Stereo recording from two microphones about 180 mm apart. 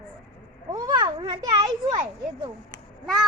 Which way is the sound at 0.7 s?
20° right (ahead or behind).